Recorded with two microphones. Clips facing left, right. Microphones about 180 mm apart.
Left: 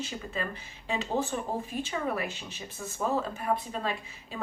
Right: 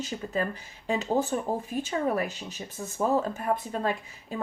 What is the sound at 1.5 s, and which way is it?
Speech, 40° right (ahead or behind).